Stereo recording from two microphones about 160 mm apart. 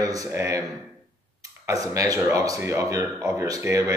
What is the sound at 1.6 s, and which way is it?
Speech, 20° right (ahead or behind).